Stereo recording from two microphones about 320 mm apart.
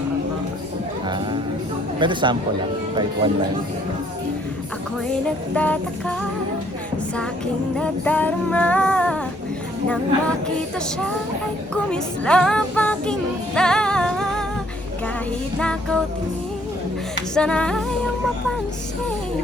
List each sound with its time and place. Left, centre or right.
1.0 s music: centre
2.0 s speech: centre
5.5 s music: centre
7.8 s music: centre
11.7 s music: centre
15.5 s music: centre
17.3 s music: centre